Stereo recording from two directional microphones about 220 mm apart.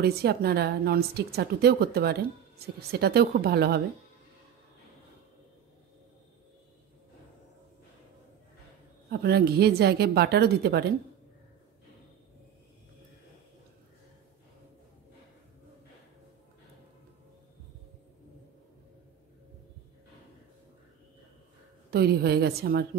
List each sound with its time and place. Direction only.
0.0 s a woman's voice: 45° right (ahead or behind)
9.1 s a woman's voice: 45° right (ahead or behind)
21.9 s a woman's voice: 45° right (ahead or behind)